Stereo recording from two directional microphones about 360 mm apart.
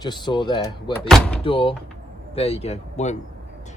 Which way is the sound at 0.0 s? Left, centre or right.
Centre.